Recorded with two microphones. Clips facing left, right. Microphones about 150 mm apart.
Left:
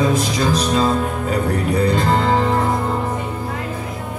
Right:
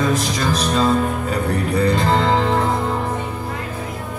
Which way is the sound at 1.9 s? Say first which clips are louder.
Even; 5° left (ahead or behind).